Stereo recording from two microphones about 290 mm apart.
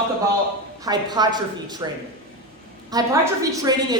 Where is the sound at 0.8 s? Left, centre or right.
Centre.